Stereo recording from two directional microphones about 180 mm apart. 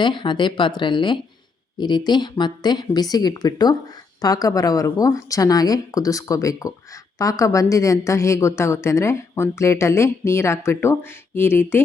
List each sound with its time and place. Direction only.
0.0 s a woman's voice: 25° left (ahead or behind)